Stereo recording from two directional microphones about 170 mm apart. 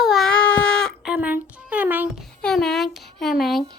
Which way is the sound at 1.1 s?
10° right (ahead or behind).